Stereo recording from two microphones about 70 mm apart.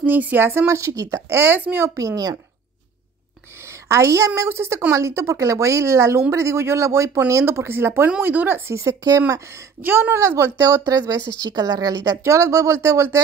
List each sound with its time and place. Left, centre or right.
0.0 s speech: right
0.7 s a woman's voice: right
2.0 s speech: right
3.6 s a sound: right
4.4 s a woman's voice: right
9.8 s speech: right
10.9 s a woman's voice: right
12.2 s a woman's voice: right